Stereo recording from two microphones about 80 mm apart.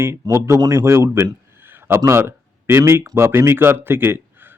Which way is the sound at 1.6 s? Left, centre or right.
Right.